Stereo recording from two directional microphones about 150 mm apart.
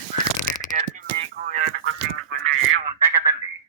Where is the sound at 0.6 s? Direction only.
60° right (ahead or behind).